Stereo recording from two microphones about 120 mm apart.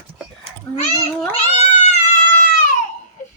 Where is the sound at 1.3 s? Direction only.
65° left (ahead or behind); by 2.7 s 90° left.